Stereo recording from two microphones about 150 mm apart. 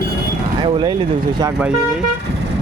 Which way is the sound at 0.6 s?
30° right (ahead or behind).